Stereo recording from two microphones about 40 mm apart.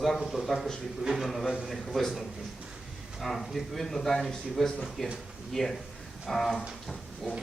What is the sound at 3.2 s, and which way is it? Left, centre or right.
Speech, centre.